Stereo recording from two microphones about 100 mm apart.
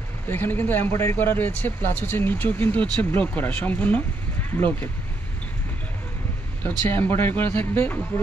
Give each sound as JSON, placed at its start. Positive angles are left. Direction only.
{"t": 0.3, "sound": "speech", "side_deg": 20}
{"t": 6.6, "sound": "speech", "side_deg": 20}